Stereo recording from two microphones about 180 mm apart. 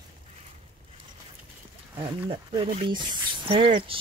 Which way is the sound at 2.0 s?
30° right (ahead or behind).